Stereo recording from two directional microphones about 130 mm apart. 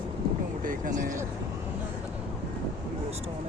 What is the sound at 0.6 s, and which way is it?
Vehicle, 90° right.